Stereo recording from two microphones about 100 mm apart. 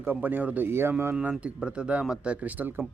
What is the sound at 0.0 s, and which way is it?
A man's voice, 20° right (ahead or behind).